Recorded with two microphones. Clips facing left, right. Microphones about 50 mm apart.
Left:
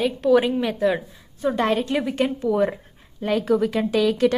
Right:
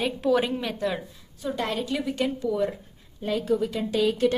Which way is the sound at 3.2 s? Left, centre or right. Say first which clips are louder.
Left 5 dB; left.